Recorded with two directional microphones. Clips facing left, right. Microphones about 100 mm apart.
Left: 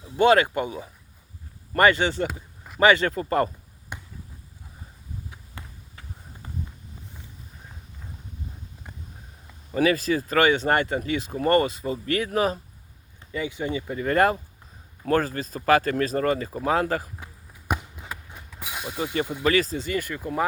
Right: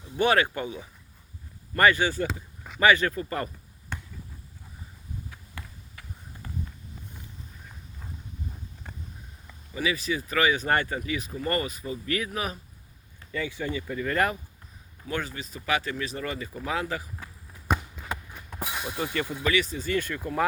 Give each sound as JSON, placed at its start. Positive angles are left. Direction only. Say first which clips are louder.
{"t": 0.2, "sound": "speech", "louder": "left 5 dB", "side_deg": 20}
{"t": 1.7, "sound": "speech", "louder": "left 2 dB", "side_deg": 25}
{"t": 3.9, "sound": "basketball bounce", "louder": "right 1 dB", "side_deg": 15}
{"t": 5.3, "sound": "a sound", "louder": "left 1 dB", "side_deg": 25}
{"t": 9.7, "sound": "speech", "louder": "left 7 dB", "side_deg": 45}
{"t": 13.3, "sound": "speech", "louder": "left 3 dB", "side_deg": 20}
{"t": 17.2, "sound": "basketball bounce", "louder": "even", "side_deg": 20}
{"t": 17.7, "sound": "run", "louder": "right 1 dB", "side_deg": 10}
{"t": 18.7, "sound": "speech", "louder": "left 2 dB", "side_deg": 15}
{"t": 19.4, "sound": "speech", "louder": "left 5 dB", "side_deg": 35}
{"t": 19.8, "sound": "speech", "louder": "even", "side_deg": 15}